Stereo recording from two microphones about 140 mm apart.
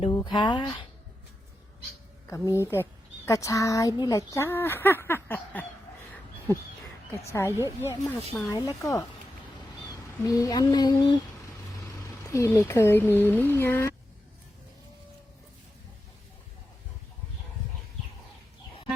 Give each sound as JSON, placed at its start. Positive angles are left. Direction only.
{"t": 0.1, "sound": "speech", "side_deg": 30}
{"t": 2.3, "sound": "speech", "side_deg": 20}
{"t": 7.3, "sound": "speech", "side_deg": 20}
{"t": 7.5, "sound": "speech", "side_deg": -15}
{"t": 8.3, "sound": "speech", "side_deg": 25}
{"t": 11.8, "sound": "vehicle", "side_deg": 25}
{"t": 12.5, "sound": "speech", "side_deg": 20}